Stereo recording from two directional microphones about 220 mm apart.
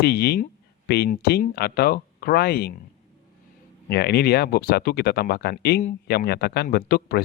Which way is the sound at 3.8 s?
45° left (ahead or behind).